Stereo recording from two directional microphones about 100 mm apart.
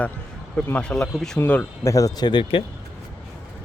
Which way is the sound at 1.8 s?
35° left (ahead or behind).